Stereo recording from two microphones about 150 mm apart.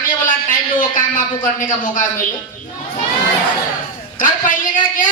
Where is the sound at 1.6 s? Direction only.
65° left (ahead or behind).